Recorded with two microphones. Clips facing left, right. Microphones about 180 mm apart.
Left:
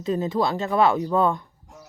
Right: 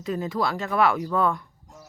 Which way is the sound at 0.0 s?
25° left (ahead or behind).